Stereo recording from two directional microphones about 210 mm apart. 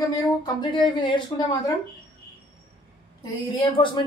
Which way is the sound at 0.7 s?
25° left (ahead or behind).